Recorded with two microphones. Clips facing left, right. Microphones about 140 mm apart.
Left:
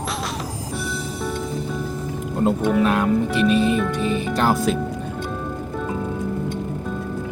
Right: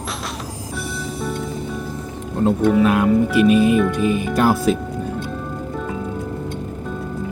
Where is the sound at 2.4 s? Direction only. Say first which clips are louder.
Right 3 dB; centre (ahead or behind).